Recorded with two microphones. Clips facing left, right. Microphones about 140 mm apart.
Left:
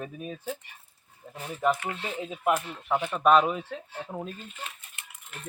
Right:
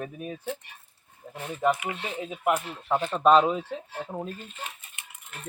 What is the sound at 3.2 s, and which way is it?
Speech, 25° right (ahead or behind).